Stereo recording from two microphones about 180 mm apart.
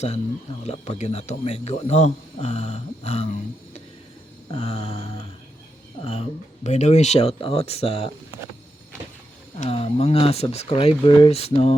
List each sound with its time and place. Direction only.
0.6 s a man's voice: 40° left (ahead or behind)
4.5 s a man's voice: 35° left (ahead or behind)
9.6 s a man's voice: 35° left (ahead or behind)